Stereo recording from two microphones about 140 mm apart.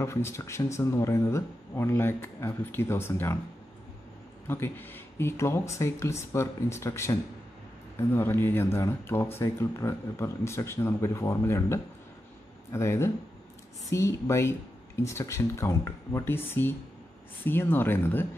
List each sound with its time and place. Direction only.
0.0 s speech: 20° left (ahead or behind)
4.5 s speech: 15° left (ahead or behind)